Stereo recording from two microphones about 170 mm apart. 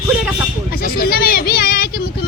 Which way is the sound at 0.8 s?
60° left (ahead or behind).